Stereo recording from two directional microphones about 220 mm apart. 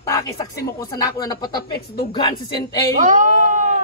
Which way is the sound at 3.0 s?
35° right (ahead or behind).